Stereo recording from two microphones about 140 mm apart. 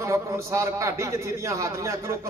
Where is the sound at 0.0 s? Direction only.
20° right (ahead or behind).